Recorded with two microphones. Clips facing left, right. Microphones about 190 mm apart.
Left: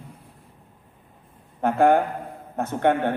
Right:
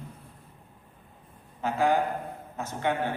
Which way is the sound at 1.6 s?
55° left (ahead or behind).